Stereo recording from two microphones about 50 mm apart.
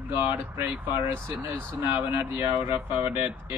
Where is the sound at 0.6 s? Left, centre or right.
Right.